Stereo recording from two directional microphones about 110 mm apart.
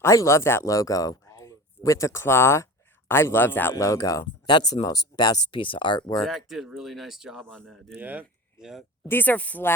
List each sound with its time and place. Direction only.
0.0 s speech: 25° left (ahead or behind); by 6.1 s 45° left (ahead or behind)
6.2 s speech: centre (ahead or behind)
7.9 s speech: 15° right (ahead or behind)
9.0 s speech: 15° left (ahead or behind)